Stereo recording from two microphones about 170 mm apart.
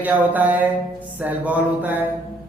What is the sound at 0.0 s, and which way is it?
Speech, 10° right (ahead or behind).